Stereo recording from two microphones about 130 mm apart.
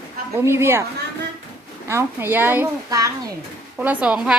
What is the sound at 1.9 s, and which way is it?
Speech, 20° right (ahead or behind).